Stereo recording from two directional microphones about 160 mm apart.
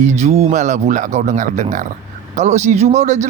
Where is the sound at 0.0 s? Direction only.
45° right (ahead or behind).